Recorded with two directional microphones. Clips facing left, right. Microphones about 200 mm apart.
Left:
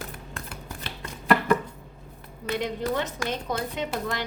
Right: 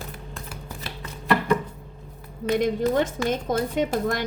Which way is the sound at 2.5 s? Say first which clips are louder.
Right 6 dB; 45° right (ahead or behind).